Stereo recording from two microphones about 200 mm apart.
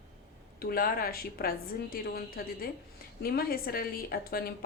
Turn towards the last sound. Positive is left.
turn(degrees=50)  # may be behind; listen again after turning